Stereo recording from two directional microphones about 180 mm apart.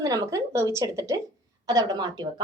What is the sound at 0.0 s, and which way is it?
A woman's voice, 15° right (ahead or behind).